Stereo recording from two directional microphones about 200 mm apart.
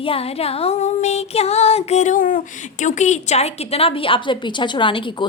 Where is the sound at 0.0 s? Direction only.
30° left (ahead or behind).